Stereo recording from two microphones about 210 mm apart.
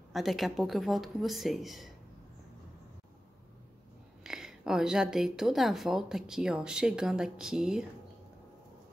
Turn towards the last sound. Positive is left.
turn(degrees=-5)  # may be behind; listen again after turning